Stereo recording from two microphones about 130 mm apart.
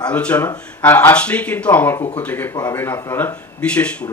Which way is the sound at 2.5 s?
25° left (ahead or behind).